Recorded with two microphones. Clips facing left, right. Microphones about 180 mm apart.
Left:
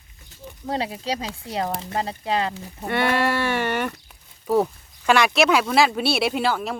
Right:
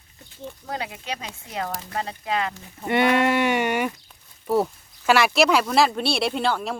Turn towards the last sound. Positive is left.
turn(degrees=0)  # may be behind; listen again after turning